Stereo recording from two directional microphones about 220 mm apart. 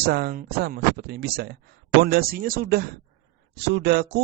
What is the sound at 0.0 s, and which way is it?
Speech, 45° right (ahead or behind).